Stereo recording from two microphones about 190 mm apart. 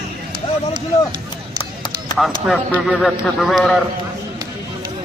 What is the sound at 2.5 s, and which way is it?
Speech, centre (ahead or behind).